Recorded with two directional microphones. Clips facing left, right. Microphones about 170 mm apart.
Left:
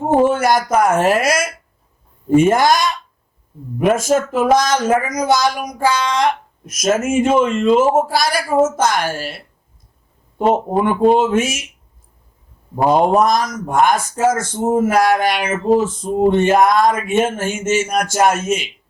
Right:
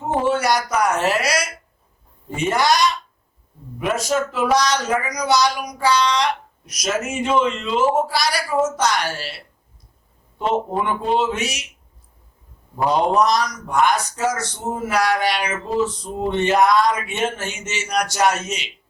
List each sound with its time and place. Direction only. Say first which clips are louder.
0.0 s a man's voice: left 6 dB; 50° left (ahead or behind)
12.7 s a man's voice: left 5 dB; 50° left (ahead or behind)